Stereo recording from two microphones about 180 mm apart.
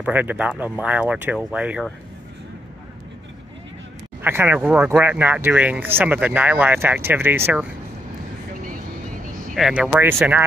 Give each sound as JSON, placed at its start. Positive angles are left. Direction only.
{"t": 0.0, "sound": "speech", "side_deg": -10}
{"t": 4.2, "sound": "speech", "side_deg": -10}
{"t": 9.6, "sound": "speech", "side_deg": -5}